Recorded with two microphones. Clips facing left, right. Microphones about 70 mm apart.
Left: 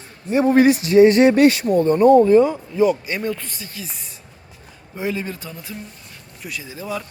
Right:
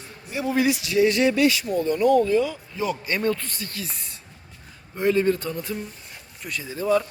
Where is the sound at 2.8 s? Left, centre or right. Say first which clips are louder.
Left 5 dB; centre.